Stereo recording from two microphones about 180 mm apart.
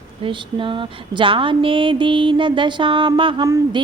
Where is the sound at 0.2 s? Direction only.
30° right (ahead or behind).